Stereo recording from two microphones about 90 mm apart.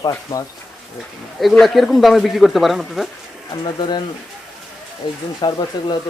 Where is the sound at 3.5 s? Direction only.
55° left (ahead or behind).